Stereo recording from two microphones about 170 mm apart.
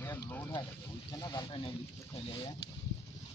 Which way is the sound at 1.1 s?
25° left (ahead or behind).